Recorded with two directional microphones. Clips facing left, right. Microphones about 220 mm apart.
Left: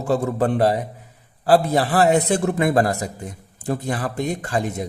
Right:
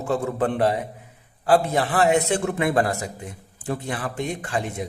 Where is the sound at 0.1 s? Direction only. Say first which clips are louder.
Left 3 dB; 35° left (ahead or behind).